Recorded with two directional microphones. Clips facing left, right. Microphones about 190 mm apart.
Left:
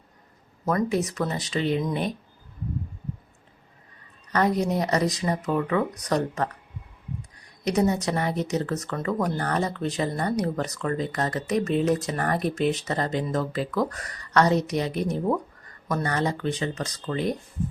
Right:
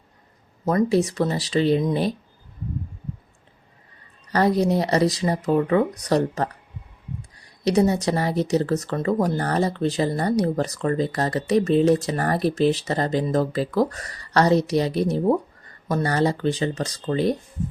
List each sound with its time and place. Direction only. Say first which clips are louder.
0.6 s speech: right 5 dB; 25° right (ahead or behind)
4.3 s speech: right 4 dB; 35° right (ahead or behind)
7.6 s speech: right 4 dB; 30° right (ahead or behind)